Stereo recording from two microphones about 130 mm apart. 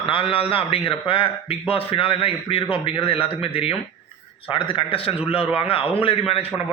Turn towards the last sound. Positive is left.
turn(degrees=50)  # may be behind; listen again after turning